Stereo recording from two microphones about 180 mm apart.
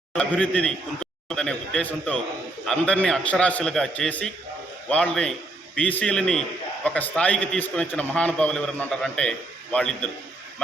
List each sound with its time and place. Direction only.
0.1 s a man's voice: 5° left (ahead or behind)